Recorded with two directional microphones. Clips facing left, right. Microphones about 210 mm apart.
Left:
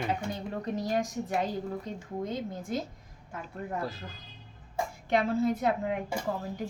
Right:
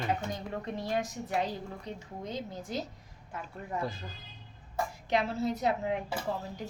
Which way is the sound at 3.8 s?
Centre (ahead or behind).